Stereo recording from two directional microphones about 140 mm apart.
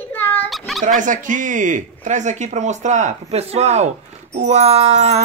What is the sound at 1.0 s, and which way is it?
Speech, 70° right (ahead or behind).